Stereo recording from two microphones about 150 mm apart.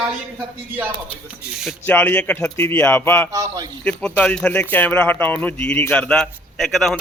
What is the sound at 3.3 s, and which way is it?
Speech, 20° right (ahead or behind).